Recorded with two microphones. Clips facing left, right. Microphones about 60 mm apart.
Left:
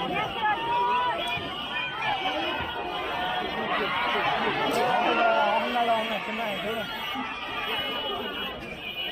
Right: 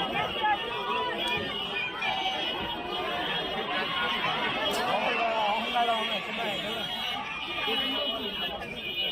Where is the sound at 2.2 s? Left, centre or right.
Left.